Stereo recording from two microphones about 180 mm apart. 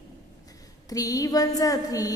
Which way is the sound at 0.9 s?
20° left (ahead or behind).